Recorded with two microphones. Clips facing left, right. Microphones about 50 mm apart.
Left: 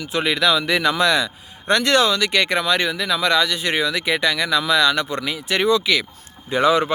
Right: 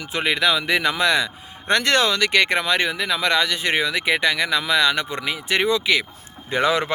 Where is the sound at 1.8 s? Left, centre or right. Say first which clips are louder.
Left 2 dB; right.